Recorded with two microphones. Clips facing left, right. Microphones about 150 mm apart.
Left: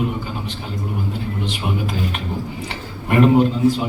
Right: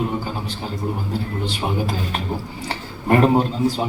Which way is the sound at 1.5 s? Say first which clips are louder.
Right 3 dB; 35° right (ahead or behind).